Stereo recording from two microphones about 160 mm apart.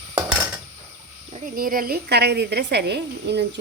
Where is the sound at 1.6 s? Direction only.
65° right (ahead or behind).